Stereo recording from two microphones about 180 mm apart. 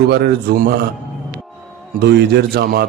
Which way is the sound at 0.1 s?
60° right (ahead or behind).